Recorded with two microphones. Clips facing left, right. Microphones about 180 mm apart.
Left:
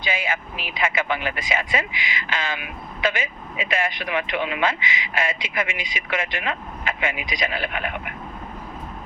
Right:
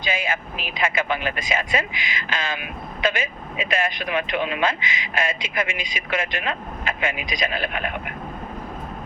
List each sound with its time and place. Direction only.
0.0 s speech: 20° left (ahead or behind)